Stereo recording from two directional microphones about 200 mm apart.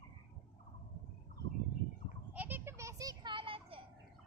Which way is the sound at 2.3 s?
10° right (ahead or behind).